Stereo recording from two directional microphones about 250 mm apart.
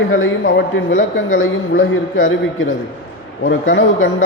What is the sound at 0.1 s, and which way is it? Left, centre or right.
A man's voice, left.